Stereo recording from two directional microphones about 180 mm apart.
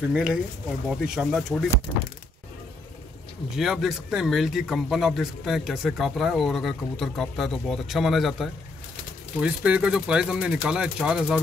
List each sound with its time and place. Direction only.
0.1 s speech: 5° right (ahead or behind)
3.5 s speech: centre (ahead or behind)